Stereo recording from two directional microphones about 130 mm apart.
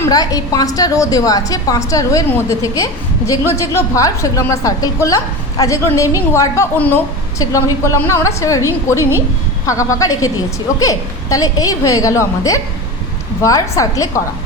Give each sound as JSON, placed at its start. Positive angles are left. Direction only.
{"t": 0.1, "sound": "a woman's voice", "side_deg": 30}
{"t": 7.3, "sound": "a woman's voice", "side_deg": 25}
{"t": 9.6, "sound": "a woman's voice", "side_deg": 25}